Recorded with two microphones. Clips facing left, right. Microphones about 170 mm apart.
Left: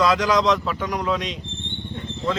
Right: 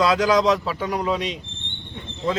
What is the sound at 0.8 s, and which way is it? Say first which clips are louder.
Speech: right 1 dB; 30° right (ahead or behind).